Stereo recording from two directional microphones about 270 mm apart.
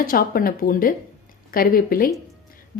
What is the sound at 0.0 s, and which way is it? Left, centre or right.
A woman's voice, left.